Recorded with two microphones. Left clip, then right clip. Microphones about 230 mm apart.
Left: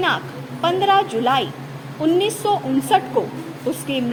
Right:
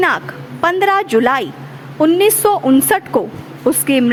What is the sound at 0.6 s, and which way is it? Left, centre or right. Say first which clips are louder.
A woman's voice: right 3 dB; right.